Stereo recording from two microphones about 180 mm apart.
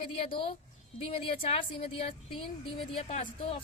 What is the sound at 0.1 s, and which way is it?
A woman's voice, 30° left (ahead or behind).